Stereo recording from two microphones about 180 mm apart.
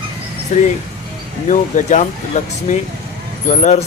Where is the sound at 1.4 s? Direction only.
45° left (ahead or behind).